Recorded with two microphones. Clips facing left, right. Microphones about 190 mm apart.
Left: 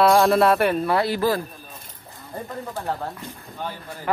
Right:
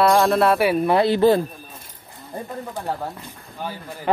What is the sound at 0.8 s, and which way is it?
Speech, 20° right (ahead or behind).